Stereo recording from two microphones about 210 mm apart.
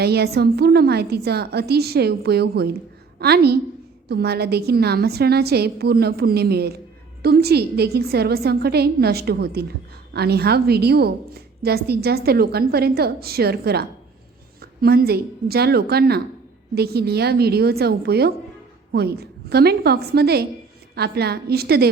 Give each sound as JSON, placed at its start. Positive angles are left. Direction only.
{"t": 0.0, "sound": "a woman's voice", "side_deg": -50}